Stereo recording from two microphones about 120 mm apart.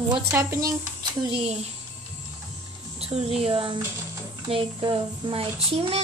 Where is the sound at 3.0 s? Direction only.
55° right (ahead or behind).